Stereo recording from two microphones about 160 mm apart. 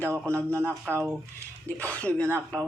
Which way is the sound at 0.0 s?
15° right (ahead or behind).